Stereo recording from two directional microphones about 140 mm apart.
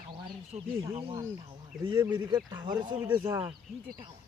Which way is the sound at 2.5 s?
30° right (ahead or behind).